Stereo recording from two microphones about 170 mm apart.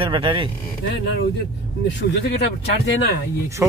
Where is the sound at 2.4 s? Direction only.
80° left.